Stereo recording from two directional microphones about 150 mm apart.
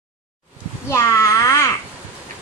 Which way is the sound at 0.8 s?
20° left (ahead or behind).